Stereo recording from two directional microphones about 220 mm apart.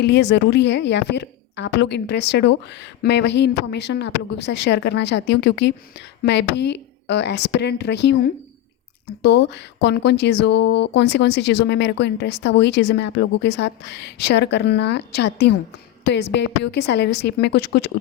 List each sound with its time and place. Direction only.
0.0 s speech: 50° left (ahead or behind)